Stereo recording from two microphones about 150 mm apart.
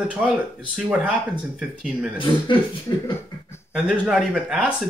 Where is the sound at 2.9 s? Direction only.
25° left (ahead or behind).